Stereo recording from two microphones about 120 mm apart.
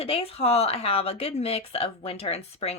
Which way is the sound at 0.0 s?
55° left (ahead or behind).